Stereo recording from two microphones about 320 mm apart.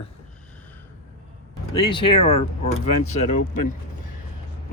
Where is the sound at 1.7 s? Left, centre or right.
Centre.